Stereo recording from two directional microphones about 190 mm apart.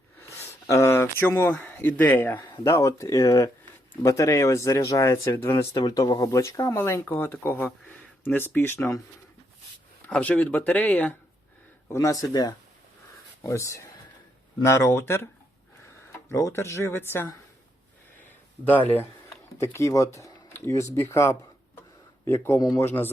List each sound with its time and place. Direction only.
0.2 s speech: 15° left (ahead or behind)
10.1 s speech: 5° left (ahead or behind)
18.6 s speech: 10° left (ahead or behind)